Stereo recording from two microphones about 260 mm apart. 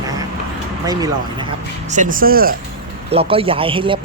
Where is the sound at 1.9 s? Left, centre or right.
Right.